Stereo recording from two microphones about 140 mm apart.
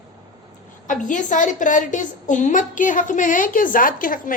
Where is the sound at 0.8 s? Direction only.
65° left (ahead or behind).